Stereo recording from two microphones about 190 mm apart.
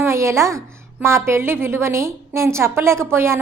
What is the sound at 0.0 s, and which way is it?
A woman's voice, 15° right (ahead or behind).